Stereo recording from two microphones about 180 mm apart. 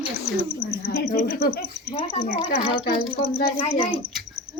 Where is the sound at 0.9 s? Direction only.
65° left (ahead or behind).